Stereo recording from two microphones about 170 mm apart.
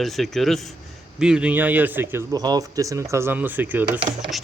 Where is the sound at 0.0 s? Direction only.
Centre (ahead or behind).